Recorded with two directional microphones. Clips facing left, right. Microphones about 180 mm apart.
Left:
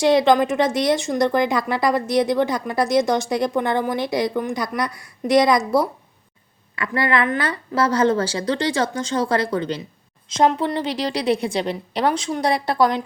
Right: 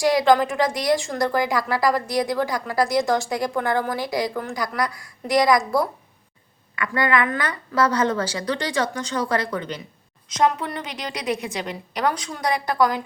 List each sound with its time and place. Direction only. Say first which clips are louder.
0.0 s a woman's voice: left 2 dB; 25° left (ahead or behind)